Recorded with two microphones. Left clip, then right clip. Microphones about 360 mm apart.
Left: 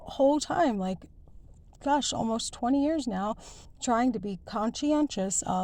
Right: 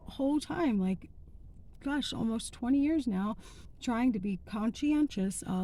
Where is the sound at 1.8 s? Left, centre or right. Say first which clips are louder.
Left 8 dB; centre.